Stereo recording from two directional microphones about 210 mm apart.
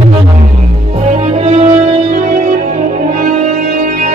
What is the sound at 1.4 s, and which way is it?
Music, 30° right (ahead or behind).